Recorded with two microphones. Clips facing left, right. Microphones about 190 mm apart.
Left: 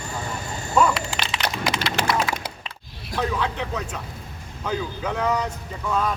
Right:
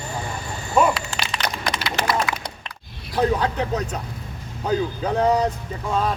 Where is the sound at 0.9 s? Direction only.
5° left (ahead or behind).